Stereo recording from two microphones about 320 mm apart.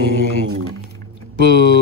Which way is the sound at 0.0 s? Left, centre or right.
Left.